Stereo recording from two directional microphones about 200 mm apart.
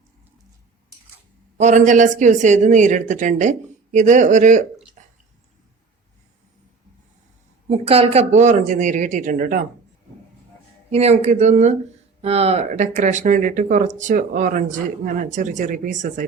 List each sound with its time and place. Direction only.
1.5 s speech: 35° right (ahead or behind)
7.7 s speech: 30° right (ahead or behind)
10.9 s speech: 35° right (ahead or behind)